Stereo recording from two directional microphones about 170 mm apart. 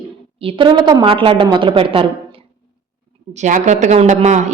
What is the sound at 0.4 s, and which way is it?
A woman's voice, 30° right (ahead or behind).